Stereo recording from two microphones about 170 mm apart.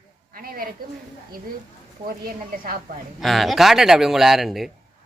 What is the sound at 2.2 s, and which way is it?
Speech, 60° right (ahead or behind).